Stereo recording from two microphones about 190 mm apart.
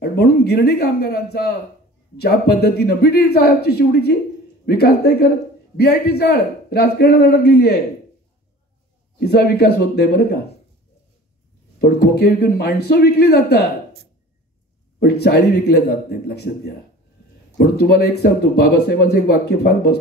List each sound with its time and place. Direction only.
0.0 s a man's voice: 60° left (ahead or behind)
9.2 s a man's voice: 60° left (ahead or behind)
11.8 s a man's voice: 60° left (ahead or behind)
15.0 s a man's voice: 60° left (ahead or behind)